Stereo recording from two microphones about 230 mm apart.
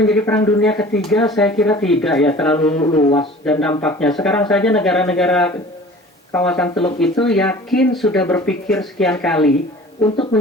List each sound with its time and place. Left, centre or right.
0.0 s speech: centre
2.8 s speech: centre
3.2 s speech: centre